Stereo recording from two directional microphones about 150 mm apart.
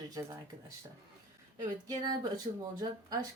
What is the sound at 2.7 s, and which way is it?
Speech, 25° right (ahead or behind).